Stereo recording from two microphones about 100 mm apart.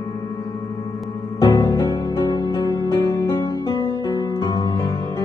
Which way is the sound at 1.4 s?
40° left (ahead or behind).